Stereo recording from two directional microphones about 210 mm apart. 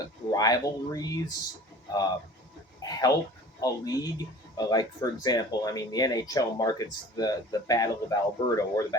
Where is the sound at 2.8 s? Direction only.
20° left (ahead or behind).